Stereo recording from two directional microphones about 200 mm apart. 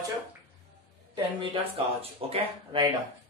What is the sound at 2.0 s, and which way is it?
Speech, 30° right (ahead or behind).